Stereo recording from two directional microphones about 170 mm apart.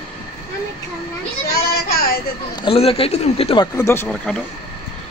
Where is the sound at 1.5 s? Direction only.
65° left (ahead or behind).